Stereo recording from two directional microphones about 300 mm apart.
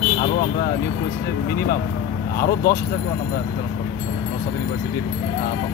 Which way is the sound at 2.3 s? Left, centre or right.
Left.